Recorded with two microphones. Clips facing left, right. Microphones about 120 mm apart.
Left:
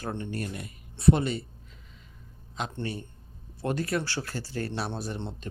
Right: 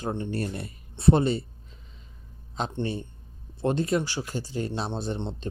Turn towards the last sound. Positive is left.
turn(degrees=-25)  # may be behind; listen again after turning